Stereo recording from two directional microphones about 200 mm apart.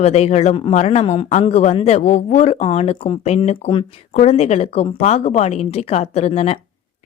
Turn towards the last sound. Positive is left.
turn(degrees=30)  # may be behind; listen again after turning